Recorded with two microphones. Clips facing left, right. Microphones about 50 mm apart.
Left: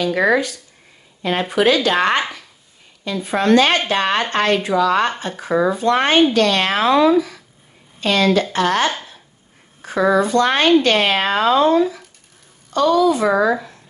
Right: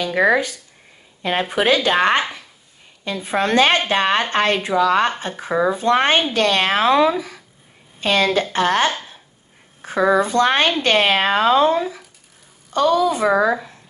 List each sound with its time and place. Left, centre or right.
0.0 s speech: centre